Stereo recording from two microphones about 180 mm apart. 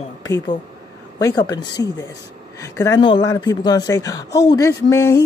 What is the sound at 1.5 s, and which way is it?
Speech, 20° left (ahead or behind).